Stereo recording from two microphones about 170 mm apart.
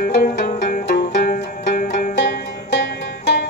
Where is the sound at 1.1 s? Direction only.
40° left (ahead or behind).